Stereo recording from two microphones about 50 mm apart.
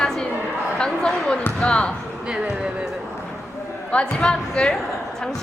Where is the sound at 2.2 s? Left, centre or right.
Centre.